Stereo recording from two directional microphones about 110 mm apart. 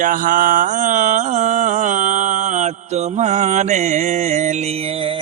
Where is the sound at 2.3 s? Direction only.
90° right.